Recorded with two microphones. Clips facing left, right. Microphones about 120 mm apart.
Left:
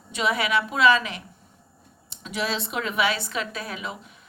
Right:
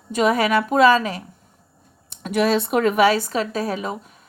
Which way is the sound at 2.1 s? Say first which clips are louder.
Right 9 dB; 55° right (ahead or behind).